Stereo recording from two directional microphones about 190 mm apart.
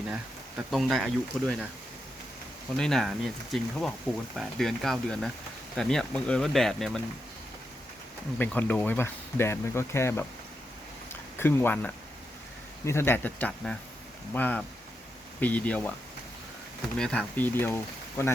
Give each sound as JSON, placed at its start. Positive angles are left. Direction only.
{"t": 0.1, "sound": "speech", "side_deg": -5}
{"t": 2.7, "sound": "speech", "side_deg": 5}
{"t": 8.4, "sound": "speech", "side_deg": 10}
{"t": 11.1, "sound": "a sound", "side_deg": 10}
{"t": 12.8, "sound": "speech", "side_deg": 15}
{"t": 17.0, "sound": "speech", "side_deg": 5}